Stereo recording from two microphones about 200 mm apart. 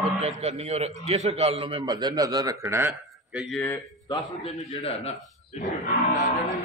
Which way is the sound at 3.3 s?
Centre (ahead or behind).